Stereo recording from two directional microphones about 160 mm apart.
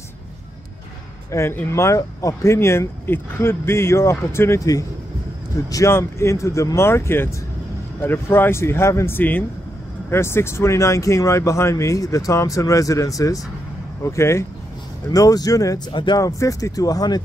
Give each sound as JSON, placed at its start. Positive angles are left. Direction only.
{"t": 1.3, "sound": "speech", "side_deg": 15}